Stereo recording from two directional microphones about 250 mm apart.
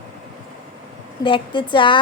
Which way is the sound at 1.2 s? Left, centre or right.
Centre.